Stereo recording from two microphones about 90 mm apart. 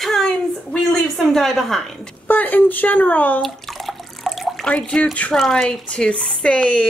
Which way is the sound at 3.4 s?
Centre (ahead or behind).